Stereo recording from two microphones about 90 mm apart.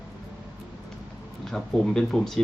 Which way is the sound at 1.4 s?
5° left (ahead or behind).